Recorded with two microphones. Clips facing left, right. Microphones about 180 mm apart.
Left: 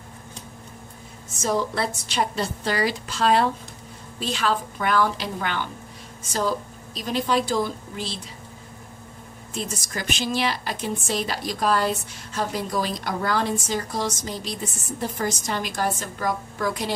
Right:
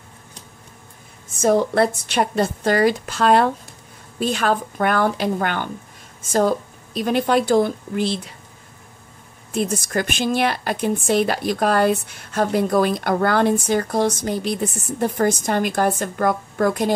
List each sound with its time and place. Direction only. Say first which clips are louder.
1.4 s a woman's voice: right 8 dB; 55° right (ahead or behind)
9.5 s a woman's voice: right 9 dB; 55° right (ahead or behind)